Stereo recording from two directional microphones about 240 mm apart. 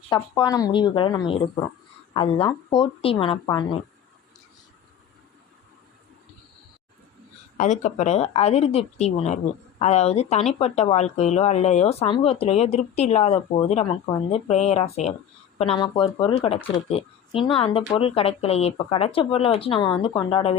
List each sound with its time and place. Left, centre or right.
0.1 s speech: centre
7.5 s speech: left